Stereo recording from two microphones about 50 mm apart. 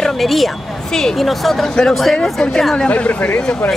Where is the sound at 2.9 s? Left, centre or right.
Left.